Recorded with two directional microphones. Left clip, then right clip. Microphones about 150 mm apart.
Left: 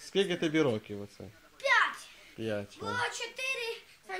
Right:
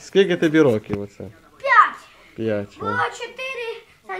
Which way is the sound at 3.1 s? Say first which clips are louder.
Right 6 dB; 10° left (ahead or behind).